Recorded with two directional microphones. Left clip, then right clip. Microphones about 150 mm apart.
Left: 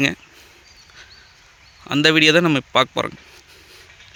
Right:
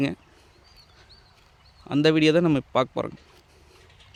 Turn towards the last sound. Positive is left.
turn(degrees=-5)  # may be behind; listen again after turning